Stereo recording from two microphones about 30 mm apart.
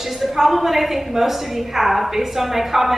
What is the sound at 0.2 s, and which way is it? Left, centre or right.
A woman's voice, centre.